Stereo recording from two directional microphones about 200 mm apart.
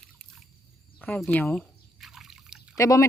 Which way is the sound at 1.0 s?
5° left (ahead or behind).